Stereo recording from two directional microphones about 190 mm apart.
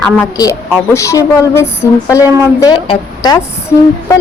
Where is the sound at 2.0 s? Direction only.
5° right (ahead or behind).